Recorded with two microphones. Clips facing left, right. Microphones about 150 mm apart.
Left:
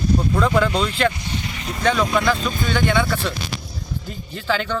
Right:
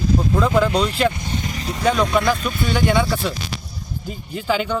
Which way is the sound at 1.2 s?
45° right (ahead or behind).